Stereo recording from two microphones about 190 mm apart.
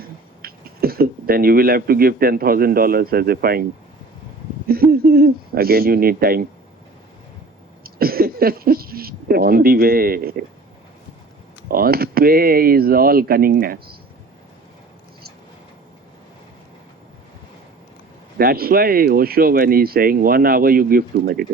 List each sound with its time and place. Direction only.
0.0 s speech: 50° right (ahead or behind)
7.9 s speech: 50° right (ahead or behind)
11.7 s speech: 50° right (ahead or behind)
18.3 s speech: 50° right (ahead or behind)